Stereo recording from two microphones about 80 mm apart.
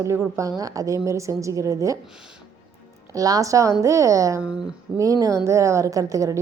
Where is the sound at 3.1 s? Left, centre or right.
Right.